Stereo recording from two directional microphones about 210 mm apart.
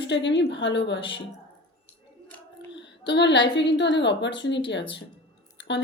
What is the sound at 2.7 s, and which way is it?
A woman's voice, 55° left (ahead or behind).